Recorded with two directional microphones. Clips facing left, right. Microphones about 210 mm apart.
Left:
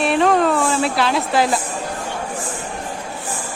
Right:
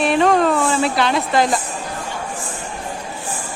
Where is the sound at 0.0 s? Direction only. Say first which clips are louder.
Right 1 dB; centre (ahead or behind).